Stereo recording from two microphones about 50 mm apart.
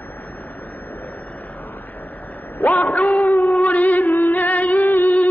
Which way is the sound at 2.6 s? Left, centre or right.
Left.